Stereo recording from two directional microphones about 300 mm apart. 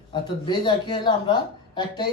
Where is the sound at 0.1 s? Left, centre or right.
Centre.